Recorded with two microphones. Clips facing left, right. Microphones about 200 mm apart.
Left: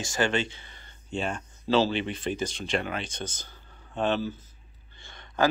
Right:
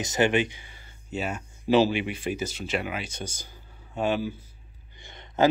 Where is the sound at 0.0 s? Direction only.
20° right (ahead or behind).